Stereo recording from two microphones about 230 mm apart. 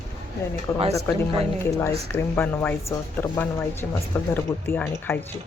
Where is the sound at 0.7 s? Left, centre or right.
Centre.